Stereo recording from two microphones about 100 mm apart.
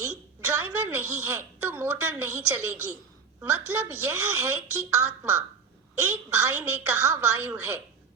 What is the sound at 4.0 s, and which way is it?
Speech, 15° right (ahead or behind).